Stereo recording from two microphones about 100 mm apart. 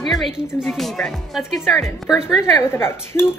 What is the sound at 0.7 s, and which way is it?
Speech, centre (ahead or behind).